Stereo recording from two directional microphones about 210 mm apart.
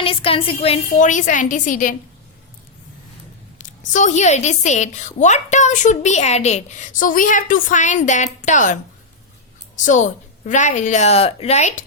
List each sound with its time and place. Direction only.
0.0 s a woman's voice: 25° left (ahead or behind)
3.6 s a woman's voice: 35° left (ahead or behind)